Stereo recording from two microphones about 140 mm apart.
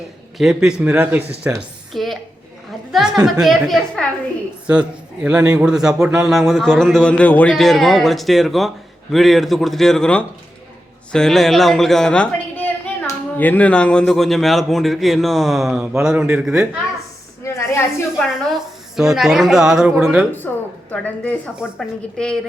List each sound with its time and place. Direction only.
0.3 s speech: 5° right (ahead or behind)
1.9 s a woman's voice: centre (ahead or behind)
2.9 s a sound: 5° right (ahead or behind)
3.4 s a man's voice: centre (ahead or behind)
17.4 s a sound: 20° left (ahead or behind)
18.9 s a man's voice: 5° right (ahead or behind)
20.5 s a man's voice: 10° left (ahead or behind)